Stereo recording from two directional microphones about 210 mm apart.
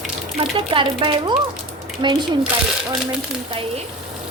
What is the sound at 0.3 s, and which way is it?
Speech, 25° right (ahead or behind).